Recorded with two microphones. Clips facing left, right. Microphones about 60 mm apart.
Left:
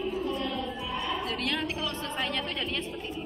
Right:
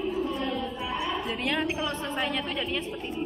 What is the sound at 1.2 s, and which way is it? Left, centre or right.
Speech, centre.